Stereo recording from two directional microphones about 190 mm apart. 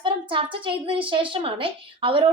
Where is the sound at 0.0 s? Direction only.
25° right (ahead or behind).